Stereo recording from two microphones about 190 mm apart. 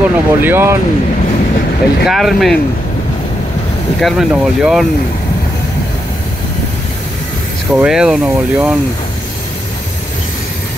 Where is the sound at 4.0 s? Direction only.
Centre (ahead or behind).